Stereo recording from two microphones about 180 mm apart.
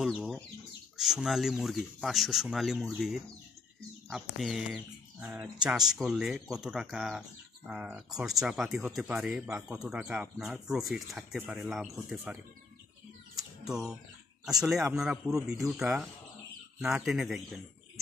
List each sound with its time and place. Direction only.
0.0 s speech: centre (ahead or behind)
13.7 s speech: 5° right (ahead or behind)
14.7 s speech: 15° right (ahead or behind)
15.0 s speech: 5° right (ahead or behind)